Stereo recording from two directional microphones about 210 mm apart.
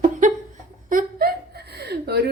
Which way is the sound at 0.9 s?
40° right (ahead or behind).